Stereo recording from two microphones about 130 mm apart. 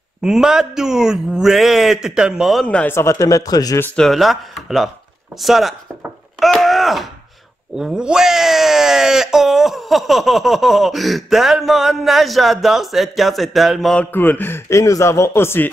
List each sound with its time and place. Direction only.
0.2 s speech: 5° right (ahead or behind)
2.9 s a man's voice: 20° left (ahead or behind)
3.8 s speech: 5° left (ahead or behind)
6.4 s a sound: centre (ahead or behind)
7.7 s speech: 5° right (ahead or behind)
14.1 s a man's voice: 15° left (ahead or behind)